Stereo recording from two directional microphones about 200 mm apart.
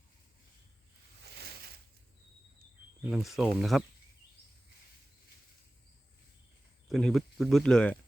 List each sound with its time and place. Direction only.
1.2 s a sound: 55° right (ahead or behind)
3.0 s speech: centre (ahead or behind)
6.8 s speech: centre (ahead or behind)